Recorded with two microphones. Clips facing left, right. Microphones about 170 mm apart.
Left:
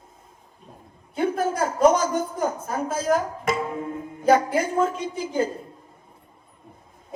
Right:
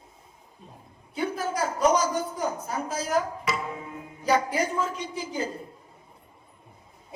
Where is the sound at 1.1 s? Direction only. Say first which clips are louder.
Left 5 dB; 50° left (ahead or behind).